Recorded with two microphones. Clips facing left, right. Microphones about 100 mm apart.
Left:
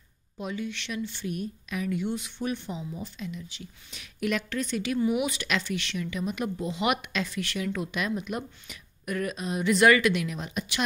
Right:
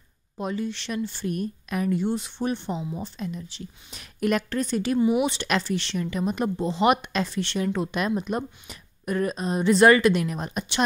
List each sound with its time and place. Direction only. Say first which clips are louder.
0.4 s a woman's voice: right 4 dB; 35° right (ahead or behind)
2.0 s a woman's voice: right 4 dB; 35° right (ahead or behind)